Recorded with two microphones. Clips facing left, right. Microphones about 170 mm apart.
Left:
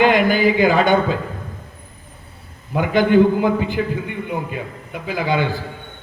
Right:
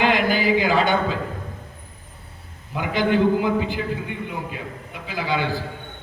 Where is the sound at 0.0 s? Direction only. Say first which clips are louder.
Left 5 dB; 50° left (ahead or behind).